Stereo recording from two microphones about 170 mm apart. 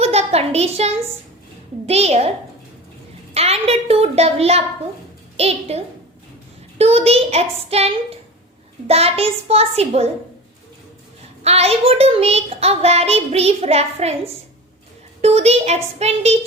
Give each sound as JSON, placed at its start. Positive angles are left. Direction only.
{"t": 0.0, "sound": "a woman's voice", "side_deg": -40}
{"t": 3.3, "sound": "a child's voice", "side_deg": -35}
{"t": 11.4, "sound": "a child's voice", "side_deg": -35}
{"t": 15.2, "sound": "a child's voice", "side_deg": -40}